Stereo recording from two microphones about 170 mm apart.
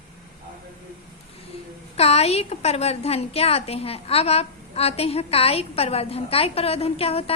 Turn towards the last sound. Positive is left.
turn(degrees=35)  # may be behind; listen again after turning